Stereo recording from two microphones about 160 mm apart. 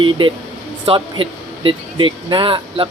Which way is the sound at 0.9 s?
30° right (ahead or behind).